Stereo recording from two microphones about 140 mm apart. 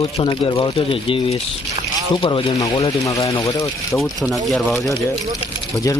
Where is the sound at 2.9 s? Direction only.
25° left (ahead or behind).